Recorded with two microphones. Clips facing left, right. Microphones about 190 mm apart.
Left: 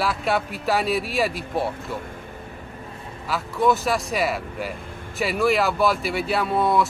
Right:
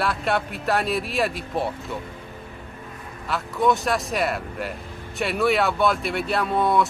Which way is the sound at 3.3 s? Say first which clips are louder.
Left 1 dB; centre (ahead or behind).